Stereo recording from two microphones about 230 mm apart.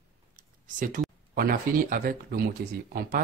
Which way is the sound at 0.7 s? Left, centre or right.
Right.